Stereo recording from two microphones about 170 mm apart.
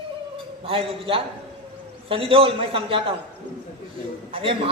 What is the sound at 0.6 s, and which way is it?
A man's voice, 35° right (ahead or behind).